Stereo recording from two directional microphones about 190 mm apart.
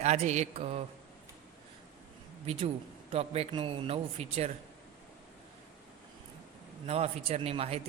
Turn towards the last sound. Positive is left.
turn(degrees=-30)  # may be behind; listen again after turning